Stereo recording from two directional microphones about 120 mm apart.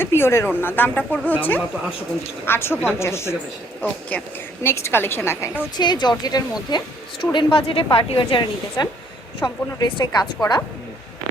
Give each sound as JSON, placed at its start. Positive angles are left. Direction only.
{"t": 0.0, "sound": "a woman's voice", "side_deg": 20}
{"t": 5.7, "sound": "speech", "side_deg": 35}